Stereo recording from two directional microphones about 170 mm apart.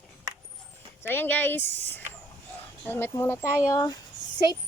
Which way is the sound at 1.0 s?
10° left (ahead or behind).